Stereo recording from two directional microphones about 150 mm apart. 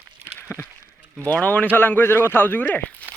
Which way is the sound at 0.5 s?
15° left (ahead or behind).